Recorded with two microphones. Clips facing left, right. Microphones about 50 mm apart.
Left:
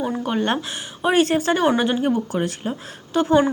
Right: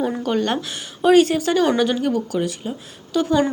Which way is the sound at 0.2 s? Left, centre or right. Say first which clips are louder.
Right 1 dB; centre.